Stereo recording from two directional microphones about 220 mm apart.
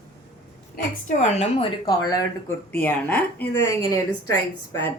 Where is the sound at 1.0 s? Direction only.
30° left (ahead or behind).